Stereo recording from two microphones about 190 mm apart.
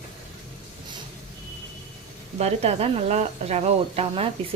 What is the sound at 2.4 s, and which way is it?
Speech, 35° right (ahead or behind).